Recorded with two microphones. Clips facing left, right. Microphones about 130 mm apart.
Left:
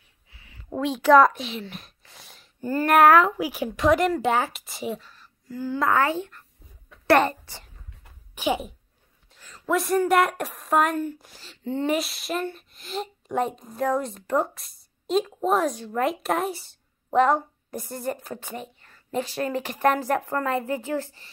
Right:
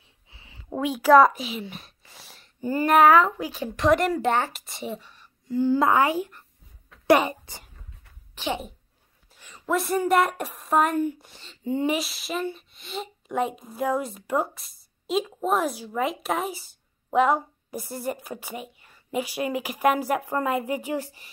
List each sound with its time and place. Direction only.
0.3 s a sound: 25° right (ahead or behind)
0.7 s speech: 5° right (ahead or behind)
2.6 s a child's voice: 10° right (ahead or behind)
2.9 s speech: centre (ahead or behind)
5.5 s a child's voice: 25° right (ahead or behind)
8.4 s speech: 10° left (ahead or behind)
9.3 s a sound: 10° right (ahead or behind)
9.7 s speech: centre (ahead or behind)